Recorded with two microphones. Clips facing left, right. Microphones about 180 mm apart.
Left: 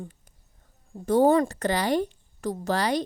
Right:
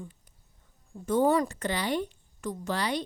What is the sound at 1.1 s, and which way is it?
A woman's voice, 35° left (ahead or behind).